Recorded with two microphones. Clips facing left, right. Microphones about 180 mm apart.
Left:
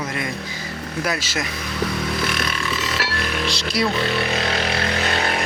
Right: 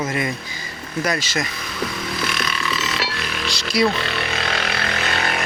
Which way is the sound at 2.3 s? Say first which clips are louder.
Even; 50° left (ahead or behind).